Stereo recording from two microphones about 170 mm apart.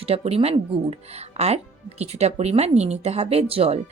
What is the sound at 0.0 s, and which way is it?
Speech, 35° right (ahead or behind).